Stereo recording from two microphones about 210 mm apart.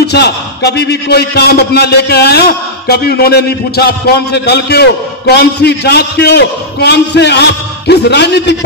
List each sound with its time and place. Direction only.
0.0 s a man's voice: 50° left (ahead or behind)